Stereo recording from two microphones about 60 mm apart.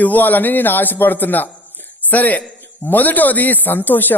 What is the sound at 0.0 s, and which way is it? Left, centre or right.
A man's voice, left.